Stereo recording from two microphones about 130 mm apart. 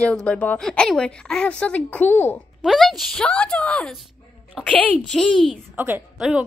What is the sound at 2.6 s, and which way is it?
Speech, 5° right (ahead or behind).